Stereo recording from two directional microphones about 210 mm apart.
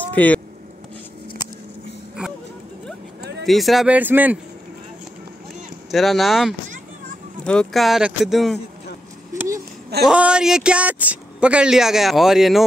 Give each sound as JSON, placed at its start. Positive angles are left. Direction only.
{"t": 0.1, "sound": "speech", "side_deg": 5}
{"t": 3.2, "sound": "a sound", "side_deg": -55}
{"t": 3.4, "sound": "speech", "side_deg": 0}
{"t": 5.9, "sound": "speech", "side_deg": 0}
{"t": 9.3, "sound": "a sound", "side_deg": -15}
{"t": 10.0, "sound": "speech", "side_deg": -5}